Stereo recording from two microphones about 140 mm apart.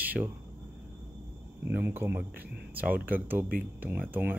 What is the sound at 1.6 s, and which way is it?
Speech, 15° right (ahead or behind).